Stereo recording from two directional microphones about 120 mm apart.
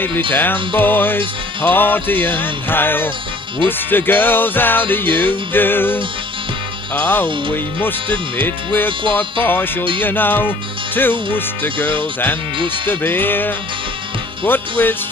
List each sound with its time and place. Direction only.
0.3 s music: 15° left (ahead or behind)
8.4 s music: 15° left (ahead or behind)